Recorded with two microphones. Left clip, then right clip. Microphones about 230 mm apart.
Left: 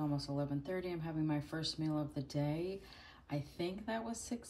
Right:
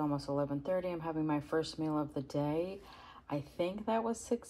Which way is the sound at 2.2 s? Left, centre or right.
Right.